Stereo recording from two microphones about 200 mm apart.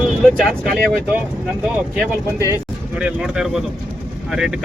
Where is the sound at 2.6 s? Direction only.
5° right (ahead or behind).